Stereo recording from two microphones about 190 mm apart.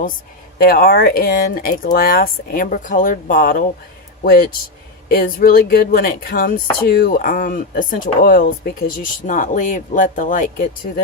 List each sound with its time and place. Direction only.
0.6 s speech: 50° left (ahead or behind)